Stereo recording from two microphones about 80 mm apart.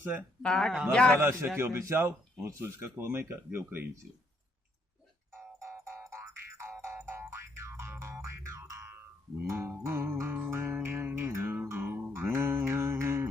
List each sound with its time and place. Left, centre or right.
0.0 s speech: right
0.4 s a man's voice: centre
1.5 s speech: right
5.6 s music: right
6.4 s music: right
9.5 s speech: right
10.5 s music: right